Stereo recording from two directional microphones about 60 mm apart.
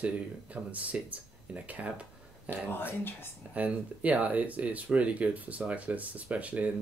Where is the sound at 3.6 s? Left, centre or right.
Right.